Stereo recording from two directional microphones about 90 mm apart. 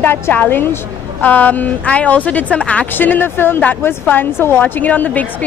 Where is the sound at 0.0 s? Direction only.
20° left (ahead or behind).